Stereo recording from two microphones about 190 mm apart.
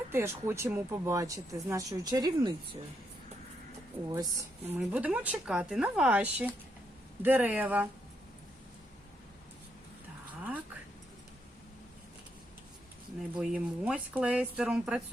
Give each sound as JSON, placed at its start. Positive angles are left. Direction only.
{"t": 0.1, "sound": "speech", "side_deg": -15}
{"t": 4.1, "sound": "speech", "side_deg": -15}
{"t": 13.3, "sound": "speech", "side_deg": -5}